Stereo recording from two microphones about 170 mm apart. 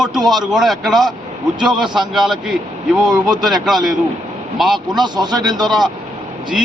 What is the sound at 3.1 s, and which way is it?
Speech, 25° right (ahead or behind).